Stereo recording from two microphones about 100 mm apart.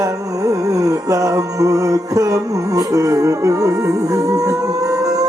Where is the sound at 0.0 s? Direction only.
35° right (ahead or behind).